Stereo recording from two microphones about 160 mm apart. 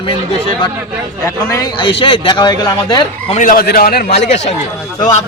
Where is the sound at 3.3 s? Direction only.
55° left (ahead or behind); by 4.1 s 75° left (ahead or behind).